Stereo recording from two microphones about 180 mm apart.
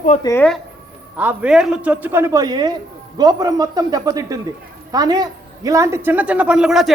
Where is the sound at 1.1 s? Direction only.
5° right (ahead or behind).